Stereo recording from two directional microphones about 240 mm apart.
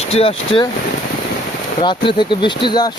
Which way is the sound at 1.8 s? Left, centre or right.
Centre.